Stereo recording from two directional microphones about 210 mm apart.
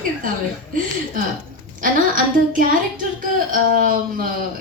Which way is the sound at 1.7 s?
40° right (ahead or behind).